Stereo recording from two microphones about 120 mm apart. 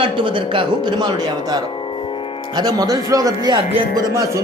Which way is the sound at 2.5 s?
30° right (ahead or behind).